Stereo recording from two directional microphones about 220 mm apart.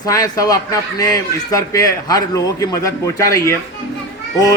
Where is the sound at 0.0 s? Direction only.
15° left (ahead or behind).